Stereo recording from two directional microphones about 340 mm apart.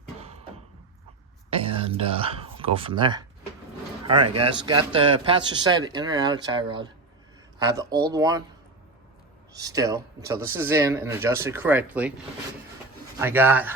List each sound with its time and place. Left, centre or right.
1.5 s speech: centre
9.6 s speech: centre
13.1 s speech: centre